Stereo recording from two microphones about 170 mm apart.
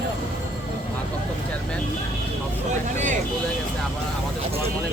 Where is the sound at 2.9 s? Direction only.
45° right (ahead or behind).